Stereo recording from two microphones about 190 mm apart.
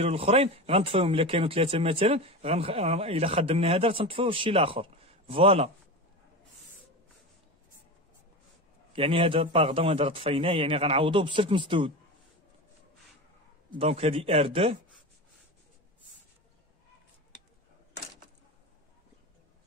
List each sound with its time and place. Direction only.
0.0 s speech: 30° right (ahead or behind)
8.9 s a man's voice: 30° right (ahead or behind)
13.7 s speech: 30° right (ahead or behind)